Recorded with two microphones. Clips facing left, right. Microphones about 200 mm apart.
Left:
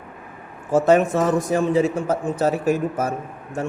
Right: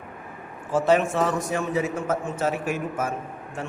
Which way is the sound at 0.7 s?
45° left (ahead or behind).